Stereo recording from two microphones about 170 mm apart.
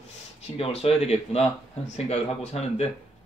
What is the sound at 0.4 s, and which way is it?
Speech, 35° left (ahead or behind).